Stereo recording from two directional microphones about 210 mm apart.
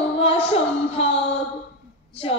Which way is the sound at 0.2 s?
25° left (ahead or behind).